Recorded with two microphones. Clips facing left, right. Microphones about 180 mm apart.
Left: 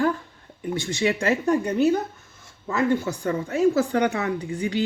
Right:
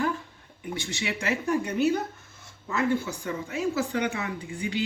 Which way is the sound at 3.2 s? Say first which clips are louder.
Left 8 dB; 50° left (ahead or behind).